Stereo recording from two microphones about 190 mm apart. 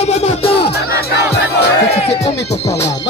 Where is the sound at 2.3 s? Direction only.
65° left (ahead or behind).